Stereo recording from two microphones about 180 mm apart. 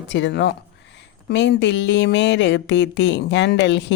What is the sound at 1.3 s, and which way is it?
Speech, 80° left.